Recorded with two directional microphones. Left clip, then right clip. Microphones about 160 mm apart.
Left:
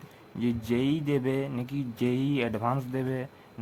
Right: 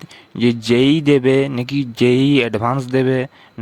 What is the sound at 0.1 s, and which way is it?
Speech, 45° right (ahead or behind).